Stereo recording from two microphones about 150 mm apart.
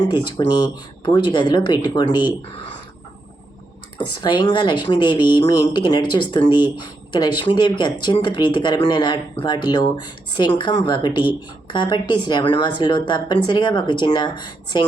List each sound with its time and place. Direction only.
0.1 s a woman's voice: 30° left (ahead or behind)
3.9 s a woman's voice: 30° left (ahead or behind)